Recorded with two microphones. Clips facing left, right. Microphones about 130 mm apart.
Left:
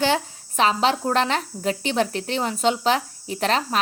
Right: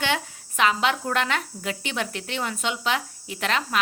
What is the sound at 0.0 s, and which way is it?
A woman's voice, 35° left (ahead or behind).